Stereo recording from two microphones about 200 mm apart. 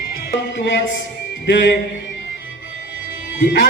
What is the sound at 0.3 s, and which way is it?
A man's voice, 60° left (ahead or behind).